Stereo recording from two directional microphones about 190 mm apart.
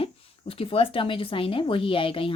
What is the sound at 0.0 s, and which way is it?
Speech, 30° left (ahead or behind).